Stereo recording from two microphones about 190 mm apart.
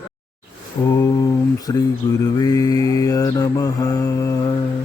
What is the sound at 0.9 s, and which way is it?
Mantra, 20° left (ahead or behind).